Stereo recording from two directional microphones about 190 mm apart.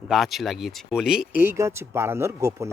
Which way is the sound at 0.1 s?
Centre (ahead or behind).